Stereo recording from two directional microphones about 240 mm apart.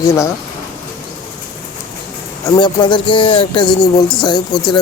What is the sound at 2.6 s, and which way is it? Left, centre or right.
Speech, centre.